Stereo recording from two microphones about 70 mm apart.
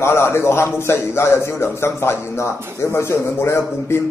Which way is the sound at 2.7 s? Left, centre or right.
Left.